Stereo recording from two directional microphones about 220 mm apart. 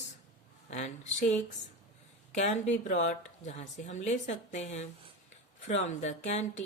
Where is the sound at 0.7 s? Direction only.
30° left (ahead or behind).